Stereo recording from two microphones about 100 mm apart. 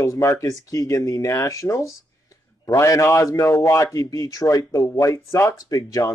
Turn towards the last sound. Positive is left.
turn(degrees=35)  # may be behind; listen again after turning